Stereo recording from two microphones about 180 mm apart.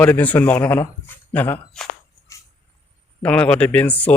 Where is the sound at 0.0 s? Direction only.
10° left (ahead or behind).